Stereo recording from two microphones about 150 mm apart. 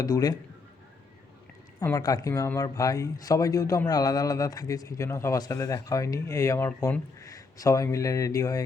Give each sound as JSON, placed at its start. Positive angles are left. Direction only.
{"t": 0.0, "sound": "speech", "side_deg": 25}
{"t": 1.8, "sound": "speech", "side_deg": 20}